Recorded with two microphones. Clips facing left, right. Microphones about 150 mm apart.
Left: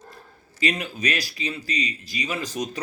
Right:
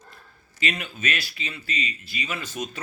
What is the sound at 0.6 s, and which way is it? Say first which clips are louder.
Speech: left 4 dB; 35° left (ahead or behind).